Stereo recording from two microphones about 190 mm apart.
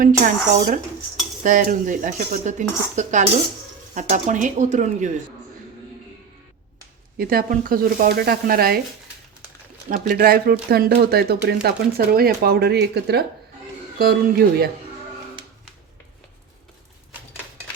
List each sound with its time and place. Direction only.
0.0 s speech: 40° right (ahead or behind)
7.2 s speech: 50° right (ahead or behind)
9.9 s speech: 45° right (ahead or behind)